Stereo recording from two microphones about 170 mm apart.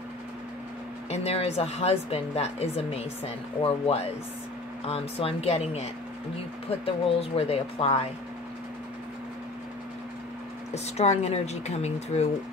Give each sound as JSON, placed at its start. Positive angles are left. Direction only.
{"t": 1.1, "sound": "speech", "side_deg": 35}
{"t": 10.7, "sound": "speech", "side_deg": 40}